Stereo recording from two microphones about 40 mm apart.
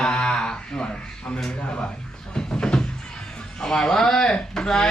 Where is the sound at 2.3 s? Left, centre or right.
Left.